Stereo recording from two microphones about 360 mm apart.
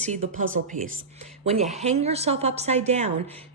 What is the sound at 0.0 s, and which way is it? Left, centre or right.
Speech, centre.